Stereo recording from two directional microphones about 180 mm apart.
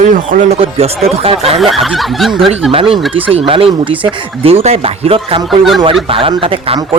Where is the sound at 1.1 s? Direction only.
35° right (ahead or behind).